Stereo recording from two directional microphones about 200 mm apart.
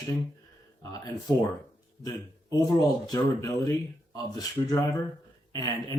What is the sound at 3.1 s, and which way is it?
A man's voice, 15° left (ahead or behind).